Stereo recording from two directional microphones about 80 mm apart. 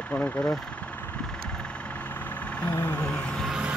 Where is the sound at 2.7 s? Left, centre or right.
Left.